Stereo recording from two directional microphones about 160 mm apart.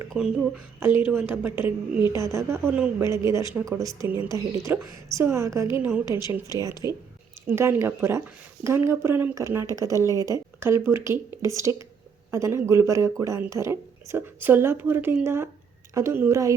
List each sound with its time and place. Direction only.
0.1 s a woman's voice: 5° right (ahead or behind)